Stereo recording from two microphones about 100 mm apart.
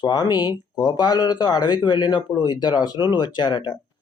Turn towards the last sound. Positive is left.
turn(degrees=50)  # may be behind; listen again after turning